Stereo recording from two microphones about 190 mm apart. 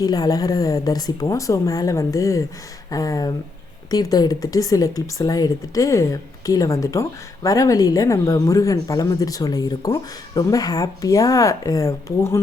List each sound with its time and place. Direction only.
0.0 s a woman's voice: 20° left (ahead or behind)